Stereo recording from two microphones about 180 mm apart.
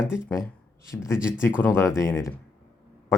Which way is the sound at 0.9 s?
10° left (ahead or behind).